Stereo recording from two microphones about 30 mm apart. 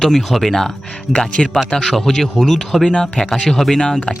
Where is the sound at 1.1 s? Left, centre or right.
Left.